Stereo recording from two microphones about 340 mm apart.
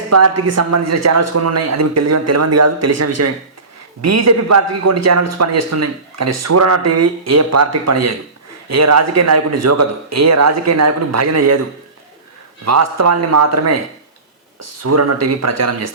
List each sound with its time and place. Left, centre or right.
0.1 s a man's voice: right
12.6 s a man's voice: right